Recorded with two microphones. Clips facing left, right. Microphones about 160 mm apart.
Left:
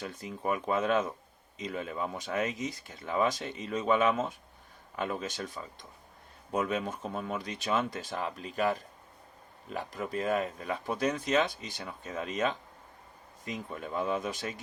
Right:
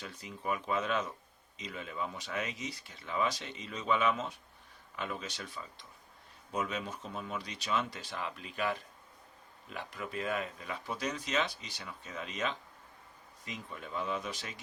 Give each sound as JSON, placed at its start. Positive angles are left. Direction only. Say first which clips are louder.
{"t": 0.0, "sound": "speech", "louder": "left 5 dB", "side_deg": 50}